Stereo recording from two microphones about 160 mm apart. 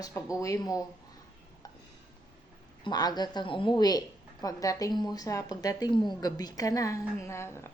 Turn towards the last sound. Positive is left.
turn(degrees=15)  # may be behind; listen again after turning